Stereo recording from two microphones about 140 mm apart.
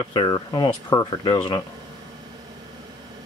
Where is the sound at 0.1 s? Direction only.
30° left (ahead or behind).